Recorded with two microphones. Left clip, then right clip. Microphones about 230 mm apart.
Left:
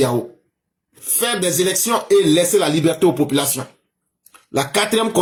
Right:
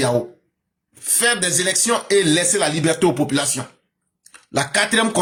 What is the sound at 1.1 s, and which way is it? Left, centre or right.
Speech, right.